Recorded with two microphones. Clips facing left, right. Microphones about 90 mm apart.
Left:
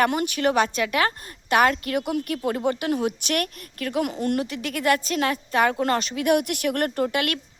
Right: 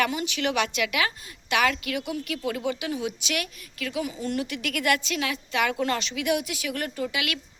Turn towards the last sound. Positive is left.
turn(degrees=45)  # may be behind; listen again after turning